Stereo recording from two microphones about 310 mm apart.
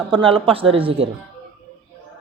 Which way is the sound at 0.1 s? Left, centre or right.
Centre.